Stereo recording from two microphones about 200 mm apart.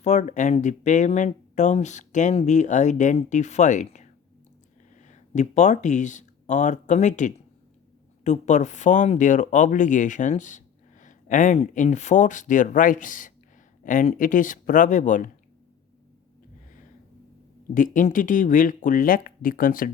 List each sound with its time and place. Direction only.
0.0 s speech: 35° left (ahead or behind)
17.7 s speech: 40° left (ahead or behind)